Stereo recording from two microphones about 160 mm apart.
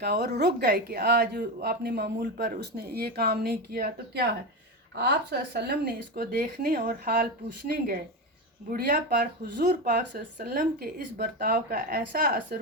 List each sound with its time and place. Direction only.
0.0 s speech: 90° right
4.9 s speech: 90° right; by 7.3 s 60° right (ahead or behind)
8.7 s speech: 70° right (ahead or behind)